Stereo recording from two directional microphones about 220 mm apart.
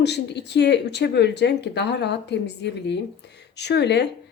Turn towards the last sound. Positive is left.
turn(degrees=50)  # may be behind; listen again after turning